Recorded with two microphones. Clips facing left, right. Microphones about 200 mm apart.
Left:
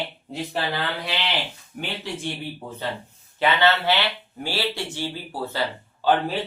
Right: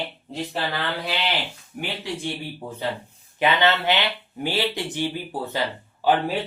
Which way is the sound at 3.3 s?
20° right (ahead or behind).